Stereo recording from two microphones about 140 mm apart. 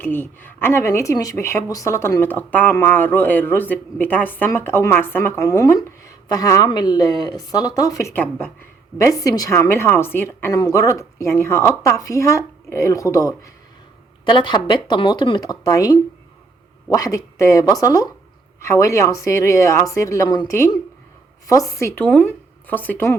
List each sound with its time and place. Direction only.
0.0 s speech: 15° left (ahead or behind)
14.3 s speech: 35° left (ahead or behind); by 23.1 s 15° left (ahead or behind)